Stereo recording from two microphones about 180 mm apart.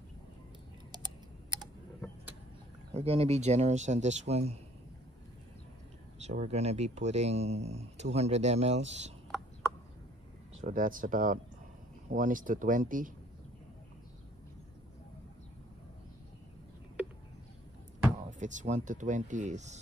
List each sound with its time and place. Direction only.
0.9 s typing: 20° right (ahead or behind)
2.9 s speech: 35° right (ahead or behind)
6.2 s speech: 40° right (ahead or behind)
10.6 s speech: 45° right (ahead or behind)
18.1 s speech: 45° right (ahead or behind)